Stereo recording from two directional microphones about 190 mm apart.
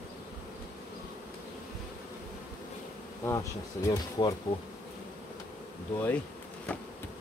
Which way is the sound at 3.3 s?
15° left (ahead or behind).